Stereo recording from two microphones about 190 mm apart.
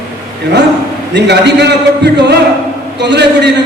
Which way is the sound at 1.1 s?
65° right (ahead or behind).